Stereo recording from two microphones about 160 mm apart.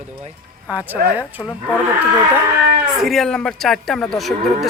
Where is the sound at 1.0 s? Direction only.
70° right (ahead or behind).